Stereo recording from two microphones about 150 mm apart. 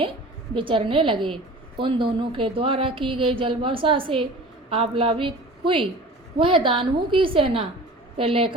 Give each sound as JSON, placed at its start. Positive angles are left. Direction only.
{"t": 0.5, "sound": "speech", "side_deg": -35}